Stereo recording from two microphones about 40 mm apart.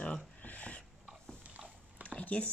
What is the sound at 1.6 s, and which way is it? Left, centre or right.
Dog, centre.